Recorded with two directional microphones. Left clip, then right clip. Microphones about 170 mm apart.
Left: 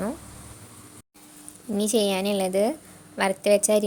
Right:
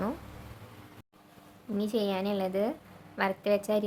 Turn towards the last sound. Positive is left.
turn(degrees=35)  # may be behind; listen again after turning